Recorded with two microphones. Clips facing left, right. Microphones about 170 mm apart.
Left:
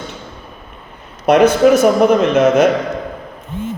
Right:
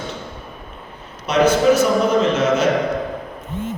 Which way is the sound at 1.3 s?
60° left (ahead or behind).